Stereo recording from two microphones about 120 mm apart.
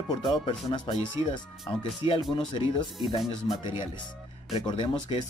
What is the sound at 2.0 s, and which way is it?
Speech, 30° right (ahead or behind).